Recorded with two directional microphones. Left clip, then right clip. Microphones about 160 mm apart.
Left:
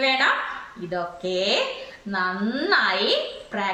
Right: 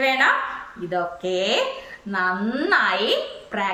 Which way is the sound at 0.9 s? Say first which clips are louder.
Right 3 dB; 15° right (ahead or behind).